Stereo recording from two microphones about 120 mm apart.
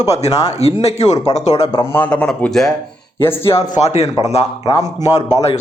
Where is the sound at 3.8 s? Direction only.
65° left (ahead or behind).